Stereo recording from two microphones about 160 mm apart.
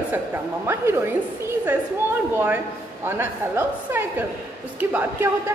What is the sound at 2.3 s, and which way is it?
A woman's voice, 10° right (ahead or behind).